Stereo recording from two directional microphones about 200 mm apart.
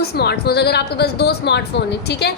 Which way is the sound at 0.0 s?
55° left (ahead or behind).